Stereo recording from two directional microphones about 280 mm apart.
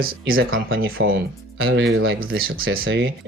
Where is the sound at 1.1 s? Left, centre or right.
Right.